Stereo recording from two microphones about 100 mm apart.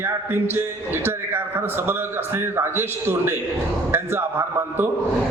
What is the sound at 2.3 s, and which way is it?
A man's voice, 25° right (ahead or behind).